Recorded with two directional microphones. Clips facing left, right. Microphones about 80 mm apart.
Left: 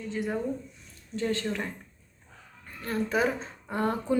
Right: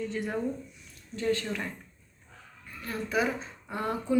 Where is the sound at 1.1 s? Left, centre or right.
Left.